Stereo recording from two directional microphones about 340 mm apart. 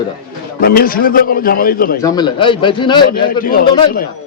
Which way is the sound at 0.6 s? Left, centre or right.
Left.